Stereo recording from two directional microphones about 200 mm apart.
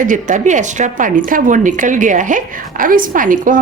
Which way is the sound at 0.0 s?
40° right (ahead or behind).